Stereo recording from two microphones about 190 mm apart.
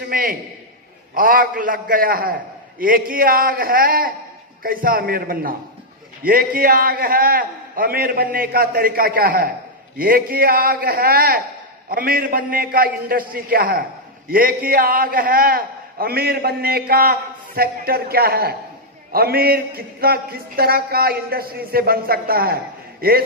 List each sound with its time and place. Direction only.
0.1 s a man's voice: 50° right (ahead or behind)